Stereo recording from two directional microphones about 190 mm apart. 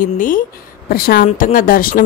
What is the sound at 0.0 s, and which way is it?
A woman's voice, 45° left (ahead or behind).